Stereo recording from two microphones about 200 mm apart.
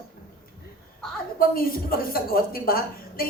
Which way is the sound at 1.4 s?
45° left (ahead or behind).